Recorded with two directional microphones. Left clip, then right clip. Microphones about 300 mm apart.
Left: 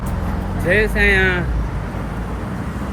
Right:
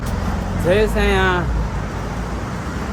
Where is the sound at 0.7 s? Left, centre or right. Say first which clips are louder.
Left 2 dB; centre.